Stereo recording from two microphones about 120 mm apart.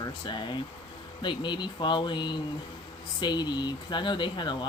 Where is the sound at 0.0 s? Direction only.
40° left (ahead or behind).